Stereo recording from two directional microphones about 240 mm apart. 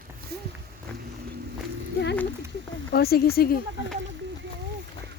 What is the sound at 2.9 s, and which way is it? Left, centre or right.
Speech, left.